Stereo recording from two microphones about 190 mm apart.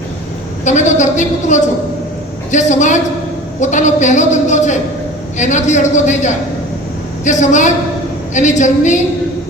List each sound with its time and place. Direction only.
0.6 s a woman's voice: 40° left (ahead or behind)